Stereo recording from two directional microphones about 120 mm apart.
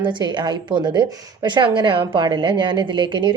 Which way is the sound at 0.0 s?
40° right (ahead or behind).